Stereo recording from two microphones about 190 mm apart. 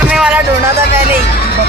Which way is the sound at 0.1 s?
5° right (ahead or behind).